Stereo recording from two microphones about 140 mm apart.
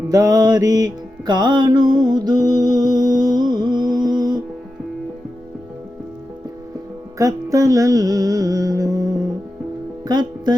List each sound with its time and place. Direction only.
0.1 s mantra: 25° right (ahead or behind)
1.3 s music: 30° right (ahead or behind)
7.2 s music: 25° right (ahead or behind)
10.0 s speech: 30° right (ahead or behind)